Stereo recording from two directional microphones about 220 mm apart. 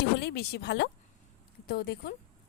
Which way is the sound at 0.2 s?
50° left (ahead or behind).